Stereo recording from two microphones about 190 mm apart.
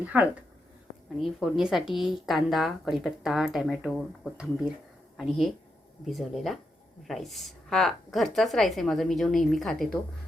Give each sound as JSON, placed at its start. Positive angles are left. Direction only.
{"t": 0.0, "sound": "a woman's voice", "side_deg": -5}